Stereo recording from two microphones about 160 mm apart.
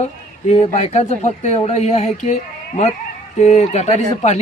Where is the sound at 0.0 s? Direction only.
45° left (ahead or behind).